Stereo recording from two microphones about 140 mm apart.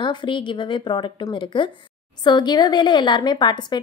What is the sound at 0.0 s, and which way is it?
A woman's voice, 35° left (ahead or behind).